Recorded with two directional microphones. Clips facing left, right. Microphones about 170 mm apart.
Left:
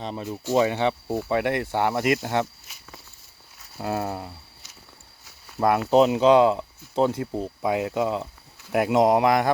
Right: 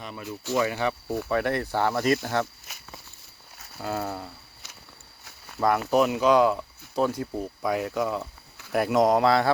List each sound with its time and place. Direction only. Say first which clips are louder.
0.0 s speech: left 5 dB; 30° left (ahead or behind)
3.8 s speech: left 3 dB; 25° left (ahead or behind)
5.5 s speech: left 4 dB; 25° left (ahead or behind)